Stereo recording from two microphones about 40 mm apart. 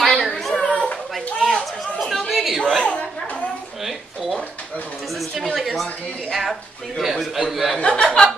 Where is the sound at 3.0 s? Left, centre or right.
Left.